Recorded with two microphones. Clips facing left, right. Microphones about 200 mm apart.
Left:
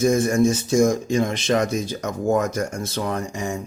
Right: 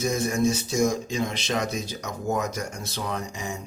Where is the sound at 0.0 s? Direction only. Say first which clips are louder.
Left 6 dB; 50° left (ahead or behind).